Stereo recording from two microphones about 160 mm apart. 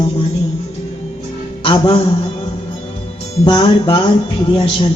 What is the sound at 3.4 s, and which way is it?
Music, 30° left (ahead or behind).